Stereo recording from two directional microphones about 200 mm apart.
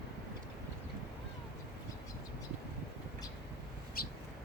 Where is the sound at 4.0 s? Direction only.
50° left (ahead or behind).